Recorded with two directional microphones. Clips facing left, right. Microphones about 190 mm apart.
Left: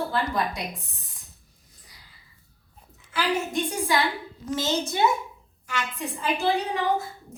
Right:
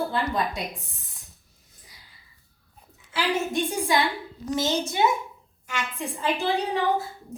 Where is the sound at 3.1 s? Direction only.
20° right (ahead or behind).